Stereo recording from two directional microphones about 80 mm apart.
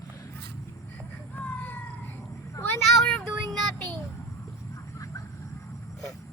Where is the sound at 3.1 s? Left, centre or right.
Centre.